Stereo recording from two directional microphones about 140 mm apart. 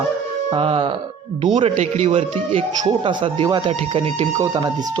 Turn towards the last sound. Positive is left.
turn(degrees=-25)  # may be behind; listen again after turning